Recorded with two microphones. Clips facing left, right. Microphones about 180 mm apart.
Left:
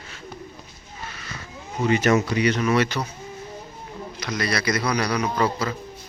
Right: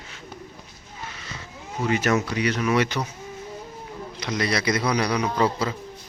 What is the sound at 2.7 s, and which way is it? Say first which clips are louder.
Speech: left 1 dB; 15° right (ahead or behind).